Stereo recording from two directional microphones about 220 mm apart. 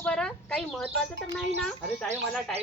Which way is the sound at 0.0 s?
5° left (ahead or behind).